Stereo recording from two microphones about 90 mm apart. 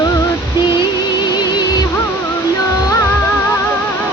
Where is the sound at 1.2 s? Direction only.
55° left (ahead or behind).